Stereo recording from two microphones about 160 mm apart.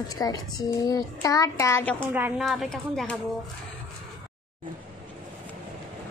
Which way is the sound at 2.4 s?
Centre (ahead or behind).